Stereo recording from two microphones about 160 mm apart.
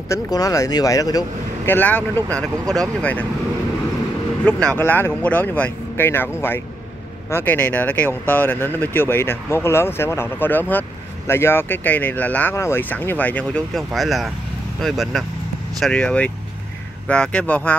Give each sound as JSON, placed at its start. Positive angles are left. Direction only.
{"t": 0.1, "sound": "speech", "side_deg": 20}
{"t": 1.7, "sound": "speech", "side_deg": 10}
{"t": 4.5, "sound": "speech", "side_deg": 5}